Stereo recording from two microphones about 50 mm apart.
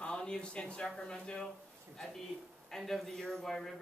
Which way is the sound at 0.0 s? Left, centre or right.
Centre.